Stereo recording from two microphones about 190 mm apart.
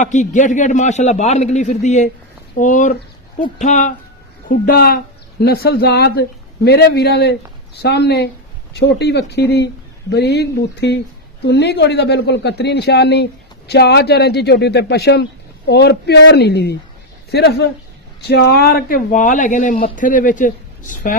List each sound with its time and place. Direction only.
0.0 s a man's voice: 40° left (ahead or behind)
4.4 s a man's voice: 50° left (ahead or behind)